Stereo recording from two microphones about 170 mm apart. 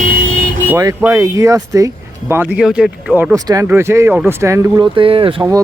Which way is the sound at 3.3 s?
20° right (ahead or behind).